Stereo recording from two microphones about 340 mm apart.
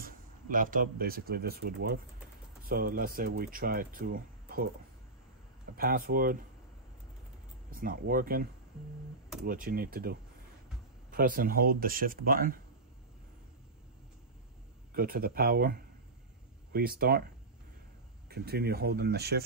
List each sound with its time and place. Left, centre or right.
0.0 s speech: right
5.8 s speech: right
7.7 s speech: right
9.5 s speech: right
15.0 s speech: right
18.3 s speech: right